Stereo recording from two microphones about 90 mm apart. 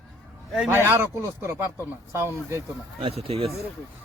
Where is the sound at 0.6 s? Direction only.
25° right (ahead or behind).